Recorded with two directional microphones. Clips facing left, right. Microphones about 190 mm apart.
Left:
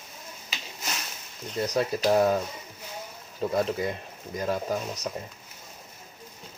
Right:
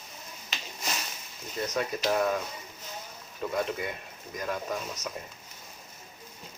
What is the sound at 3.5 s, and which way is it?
Speech, 35° left (ahead or behind).